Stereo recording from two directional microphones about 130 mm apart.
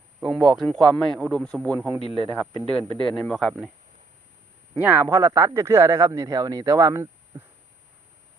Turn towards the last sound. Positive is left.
turn(degrees=-25)  # may be behind; listen again after turning